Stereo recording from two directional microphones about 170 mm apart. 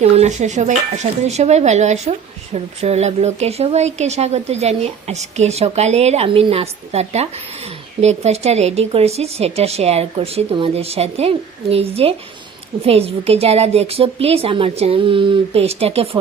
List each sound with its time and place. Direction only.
0.0 s speech: 40° right (ahead or behind)